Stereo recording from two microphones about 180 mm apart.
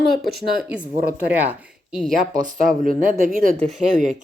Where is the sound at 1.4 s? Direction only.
Centre (ahead or behind).